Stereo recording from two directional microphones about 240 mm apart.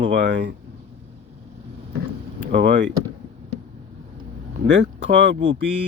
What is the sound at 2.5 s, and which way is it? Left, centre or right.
Speech, right.